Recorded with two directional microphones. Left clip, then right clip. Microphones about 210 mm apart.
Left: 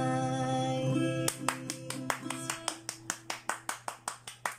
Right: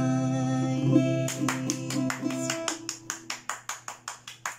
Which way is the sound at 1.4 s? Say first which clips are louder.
Right 6 dB; 40° left (ahead or behind).